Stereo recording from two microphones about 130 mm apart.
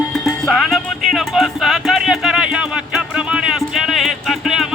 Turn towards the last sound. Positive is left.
turn(degrees=-5)  # may be behind; listen again after turning